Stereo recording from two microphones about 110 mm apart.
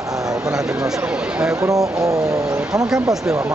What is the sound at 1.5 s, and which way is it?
Speech, 25° right (ahead or behind).